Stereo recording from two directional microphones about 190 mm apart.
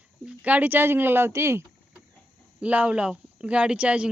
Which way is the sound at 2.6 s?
5° right (ahead or behind).